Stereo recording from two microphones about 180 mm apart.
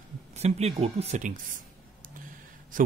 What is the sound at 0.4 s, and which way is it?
Speech, 35° right (ahead or behind).